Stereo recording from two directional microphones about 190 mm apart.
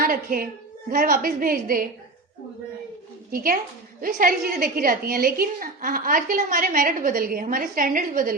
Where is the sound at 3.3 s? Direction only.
50° right (ahead or behind).